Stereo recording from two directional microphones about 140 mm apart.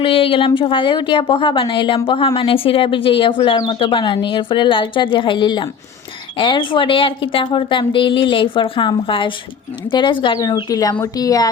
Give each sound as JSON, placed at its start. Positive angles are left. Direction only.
{"t": 0.0, "sound": "a woman's voice", "side_deg": 40}